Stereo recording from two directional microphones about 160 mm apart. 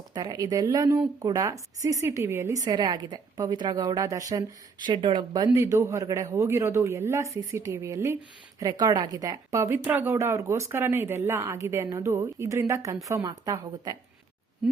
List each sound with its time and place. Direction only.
0.1 s a woman's voice: 25° right (ahead or behind)